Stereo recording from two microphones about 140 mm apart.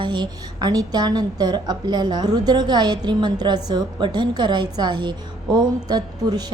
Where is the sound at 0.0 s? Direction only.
30° right (ahead or behind).